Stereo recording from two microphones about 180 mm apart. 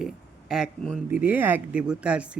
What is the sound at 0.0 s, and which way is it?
Speech, centre (ahead or behind).